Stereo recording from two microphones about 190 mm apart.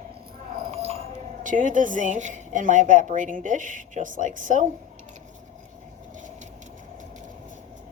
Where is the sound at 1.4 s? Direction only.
45° right (ahead or behind).